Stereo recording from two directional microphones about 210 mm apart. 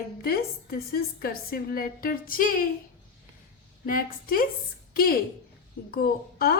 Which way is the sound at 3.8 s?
40° left (ahead or behind).